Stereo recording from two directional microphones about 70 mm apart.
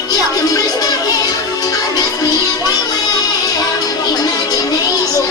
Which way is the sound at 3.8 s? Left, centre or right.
Left.